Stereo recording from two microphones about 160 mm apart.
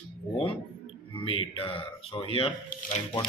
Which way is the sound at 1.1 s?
35° left (ahead or behind).